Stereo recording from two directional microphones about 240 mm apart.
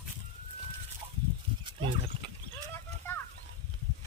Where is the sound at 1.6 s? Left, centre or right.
Right.